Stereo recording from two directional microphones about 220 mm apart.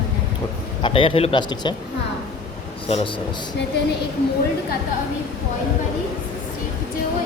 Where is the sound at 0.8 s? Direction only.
25° left (ahead or behind).